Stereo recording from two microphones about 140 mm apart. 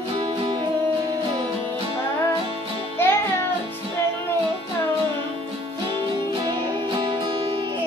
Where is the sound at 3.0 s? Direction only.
15° left (ahead or behind).